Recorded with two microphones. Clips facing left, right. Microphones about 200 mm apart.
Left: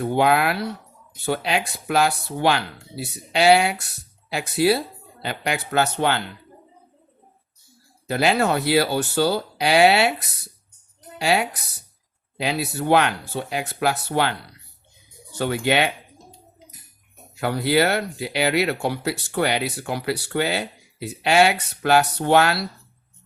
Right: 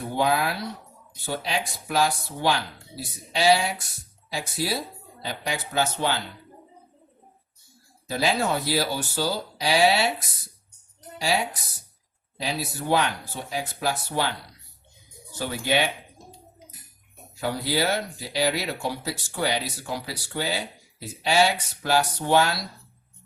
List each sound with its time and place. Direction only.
0.0 s speech: 65° left (ahead or behind)
8.0 s speech: 65° left (ahead or behind)
15.4 s speech: 65° left (ahead or behind)
17.3 s speech: 65° left (ahead or behind)